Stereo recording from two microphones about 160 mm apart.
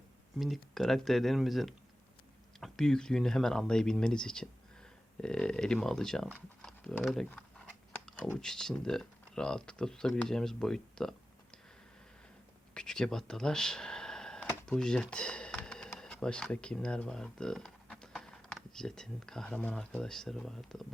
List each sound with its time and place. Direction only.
0.3 s speech: centre (ahead or behind)
6.3 s a sound: 5° left (ahead or behind)
7.0 s speech: 5° left (ahead or behind)
12.7 s speech: 5° left (ahead or behind)